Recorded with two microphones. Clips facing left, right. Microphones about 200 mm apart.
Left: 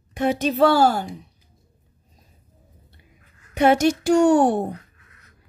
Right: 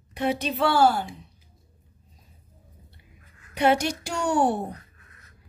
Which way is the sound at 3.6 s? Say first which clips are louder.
Left 5 dB; 50° left (ahead or behind).